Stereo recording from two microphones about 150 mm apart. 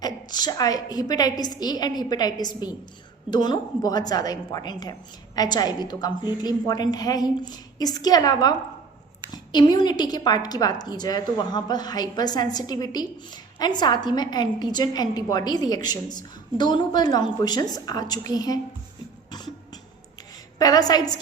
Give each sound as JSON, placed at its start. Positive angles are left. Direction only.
{"t": 0.0, "sound": "a woman's voice", "side_deg": 25}
{"t": 19.3, "sound": "beatboxing", "side_deg": 25}
{"t": 20.6, "sound": "a woman's voice", "side_deg": 25}